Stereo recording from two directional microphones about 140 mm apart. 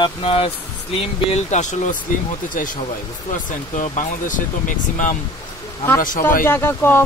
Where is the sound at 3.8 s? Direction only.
65° left (ahead or behind).